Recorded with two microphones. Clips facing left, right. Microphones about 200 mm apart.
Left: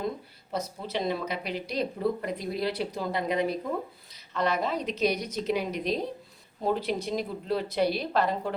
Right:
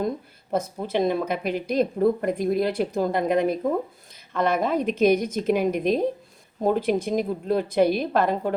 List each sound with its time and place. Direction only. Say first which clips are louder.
0.5 s a woman's voice: right 7 dB; 50° right (ahead or behind)